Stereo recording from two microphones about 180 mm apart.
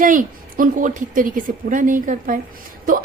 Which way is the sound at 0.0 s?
50° right (ahead or behind).